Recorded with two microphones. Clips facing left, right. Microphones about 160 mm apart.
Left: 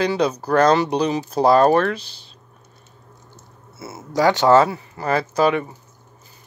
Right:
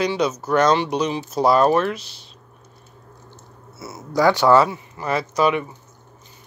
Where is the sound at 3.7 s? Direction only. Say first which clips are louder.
Left 1 dB; 25° left (ahead or behind).